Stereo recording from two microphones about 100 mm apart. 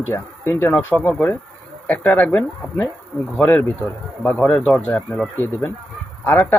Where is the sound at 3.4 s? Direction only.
20° left (ahead or behind).